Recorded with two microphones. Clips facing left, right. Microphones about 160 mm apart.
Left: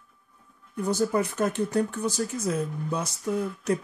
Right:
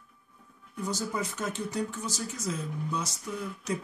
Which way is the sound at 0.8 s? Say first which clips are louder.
Left 8 dB; 60° left (ahead or behind).